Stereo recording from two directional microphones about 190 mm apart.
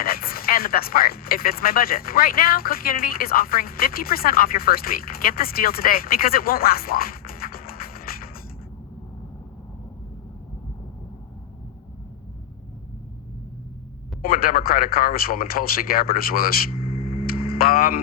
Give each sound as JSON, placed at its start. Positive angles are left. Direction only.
{"t": 0.0, "sound": "speech", "side_deg": 50}
{"t": 14.2, "sound": "speech", "side_deg": 50}